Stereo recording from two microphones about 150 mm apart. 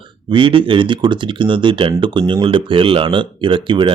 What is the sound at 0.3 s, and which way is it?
Speech, 35° right (ahead or behind).